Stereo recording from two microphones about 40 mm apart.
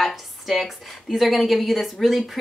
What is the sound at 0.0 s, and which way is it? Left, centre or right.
Speech, centre.